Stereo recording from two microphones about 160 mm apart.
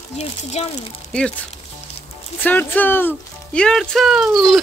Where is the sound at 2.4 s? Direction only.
10° left (ahead or behind).